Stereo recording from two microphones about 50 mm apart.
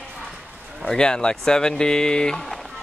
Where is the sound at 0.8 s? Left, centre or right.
Centre.